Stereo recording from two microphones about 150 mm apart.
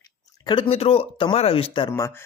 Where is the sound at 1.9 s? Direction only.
20° left (ahead or behind).